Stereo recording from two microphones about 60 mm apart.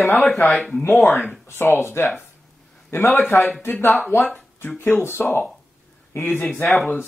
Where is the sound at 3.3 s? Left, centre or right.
Left.